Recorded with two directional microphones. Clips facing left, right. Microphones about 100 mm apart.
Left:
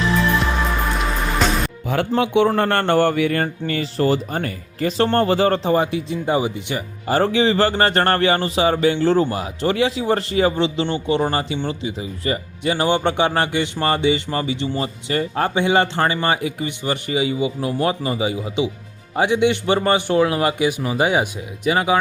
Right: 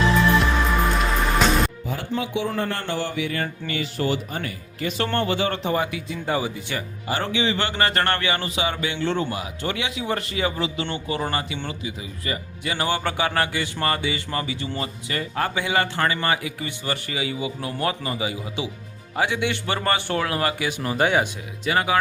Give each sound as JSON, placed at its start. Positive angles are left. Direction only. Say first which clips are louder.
{"t": 1.4, "sound": "music", "louder": "left 1 dB", "side_deg": 0}
{"t": 1.9, "sound": "a man's voice", "louder": "left 8 dB", "side_deg": 70}
{"t": 7.1, "sound": "a man's voice", "louder": "left 7 dB", "side_deg": 35}